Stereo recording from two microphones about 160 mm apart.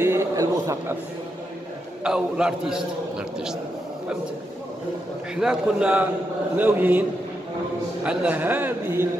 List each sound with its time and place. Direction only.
0.0 s a sound: 15° right (ahead or behind)
2.0 s a man's voice: 5° right (ahead or behind)
5.3 s a man's voice: 5° right (ahead or behind)